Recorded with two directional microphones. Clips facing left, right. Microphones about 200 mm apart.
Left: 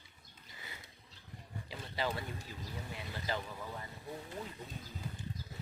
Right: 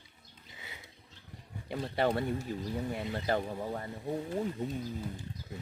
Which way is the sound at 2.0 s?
60° right (ahead or behind).